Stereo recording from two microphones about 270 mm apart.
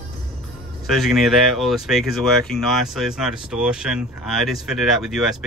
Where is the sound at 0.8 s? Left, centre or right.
Centre.